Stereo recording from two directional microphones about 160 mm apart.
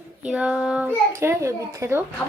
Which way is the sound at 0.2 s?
5° right (ahead or behind).